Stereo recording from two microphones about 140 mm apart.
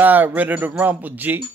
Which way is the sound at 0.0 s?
15° right (ahead or behind).